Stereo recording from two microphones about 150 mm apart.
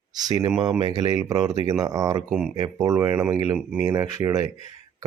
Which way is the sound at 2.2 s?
Centre (ahead or behind).